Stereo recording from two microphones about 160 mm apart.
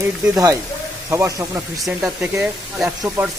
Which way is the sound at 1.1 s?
20° right (ahead or behind).